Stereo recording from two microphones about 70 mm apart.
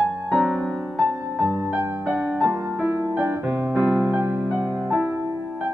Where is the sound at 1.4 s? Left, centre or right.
Right.